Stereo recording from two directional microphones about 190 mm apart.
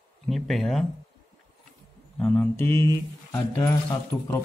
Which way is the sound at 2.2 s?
5° left (ahead or behind).